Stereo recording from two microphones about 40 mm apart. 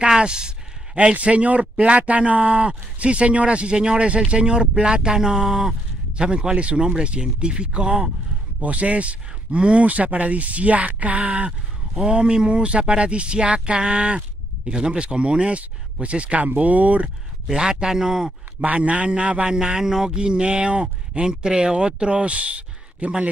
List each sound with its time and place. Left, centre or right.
0.0 s speech: right
1.1 s speech: right; by 5.8 s centre
6.1 s speech: right
8.5 s speech: right
9.8 s speech: right
17.5 s speech: centre
18.6 s speech: right
19.4 s speech: centre
20.1 s speech: right